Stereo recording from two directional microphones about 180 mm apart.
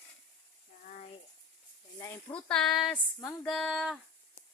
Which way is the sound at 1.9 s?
15° left (ahead or behind).